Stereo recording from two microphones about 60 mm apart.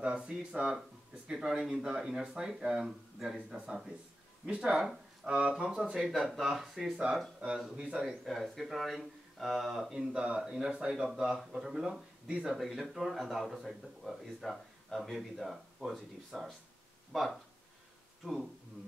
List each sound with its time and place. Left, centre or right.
0.0 s speech: centre
7.3 s speech: centre
8.0 s speech: centre
9.9 s speech: centre